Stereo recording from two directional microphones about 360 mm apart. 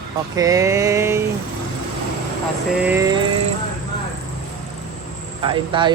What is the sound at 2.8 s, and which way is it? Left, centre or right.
Speech, centre.